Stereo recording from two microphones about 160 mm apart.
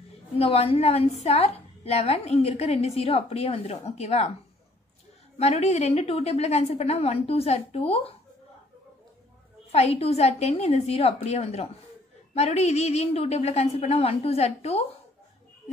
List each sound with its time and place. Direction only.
0.4 s a woman's voice: 35° left (ahead or behind)
5.4 s a woman's voice: 40° left (ahead or behind)
9.7 s a woman's voice: 40° left (ahead or behind)